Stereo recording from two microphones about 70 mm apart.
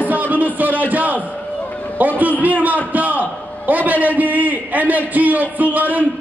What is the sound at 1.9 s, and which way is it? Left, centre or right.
A man's voice, right.